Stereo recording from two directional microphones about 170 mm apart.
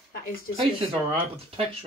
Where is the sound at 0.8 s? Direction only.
35° right (ahead or behind).